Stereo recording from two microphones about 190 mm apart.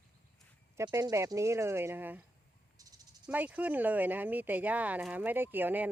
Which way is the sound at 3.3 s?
10° right (ahead or behind).